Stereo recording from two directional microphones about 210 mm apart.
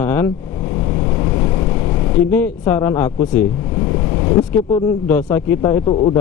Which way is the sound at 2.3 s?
10° left (ahead or behind).